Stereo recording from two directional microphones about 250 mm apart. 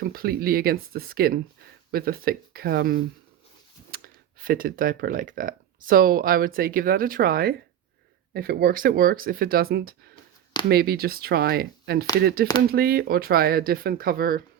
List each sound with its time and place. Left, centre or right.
0.0 s speech: right